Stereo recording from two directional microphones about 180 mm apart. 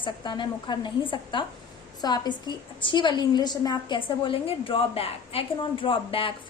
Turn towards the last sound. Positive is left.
turn(degrees=30)  # may be behind; listen again after turning